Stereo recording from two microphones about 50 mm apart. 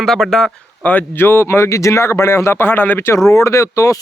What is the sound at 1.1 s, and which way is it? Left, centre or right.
Speech, left.